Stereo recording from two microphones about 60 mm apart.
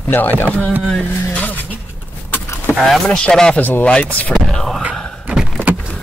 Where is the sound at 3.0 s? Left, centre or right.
Centre.